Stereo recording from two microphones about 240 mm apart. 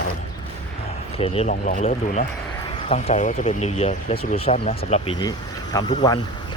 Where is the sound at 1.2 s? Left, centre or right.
Left.